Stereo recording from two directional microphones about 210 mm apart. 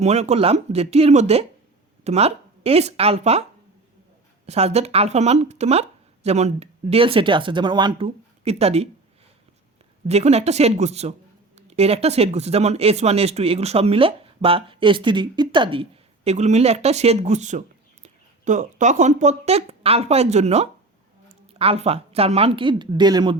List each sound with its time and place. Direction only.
0.0 s speech: 30° right (ahead or behind)
4.4 s speech: 30° right (ahead or behind)
10.1 s speech: 30° right (ahead or behind)